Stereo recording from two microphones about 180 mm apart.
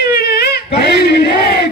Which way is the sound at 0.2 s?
60° left (ahead or behind).